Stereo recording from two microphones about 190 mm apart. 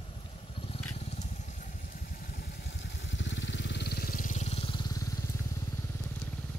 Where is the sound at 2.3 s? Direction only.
55° left (ahead or behind); by 5.0 s 25° left (ahead or behind).